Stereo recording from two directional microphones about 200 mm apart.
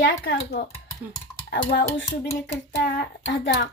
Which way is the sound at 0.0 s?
50° left (ahead or behind).